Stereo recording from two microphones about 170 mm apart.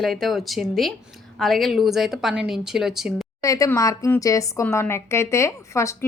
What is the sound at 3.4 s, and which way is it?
Speech, 20° left (ahead or behind).